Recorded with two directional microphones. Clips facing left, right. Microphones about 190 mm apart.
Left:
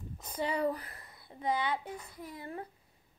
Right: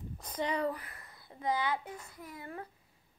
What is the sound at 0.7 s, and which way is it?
Speech, 35° left (ahead or behind).